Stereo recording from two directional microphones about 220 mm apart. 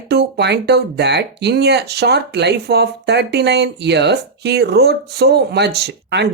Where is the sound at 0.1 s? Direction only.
50° right (ahead or behind).